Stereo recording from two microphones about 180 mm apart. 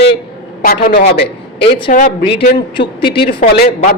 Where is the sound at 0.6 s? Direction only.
55° left (ahead or behind).